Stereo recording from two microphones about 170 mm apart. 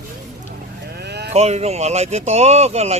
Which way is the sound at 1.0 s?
75° right (ahead or behind).